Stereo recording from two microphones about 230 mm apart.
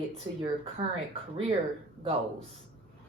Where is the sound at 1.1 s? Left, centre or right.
Right.